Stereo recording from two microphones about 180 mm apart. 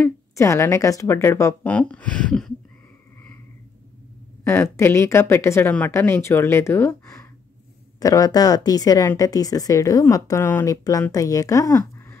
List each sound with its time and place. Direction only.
0.4 s speech: 15° left (ahead or behind)
4.7 s speech: 15° left (ahead or behind)